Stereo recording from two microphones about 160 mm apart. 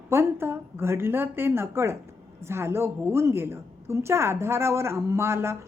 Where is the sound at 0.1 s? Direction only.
15° right (ahead or behind).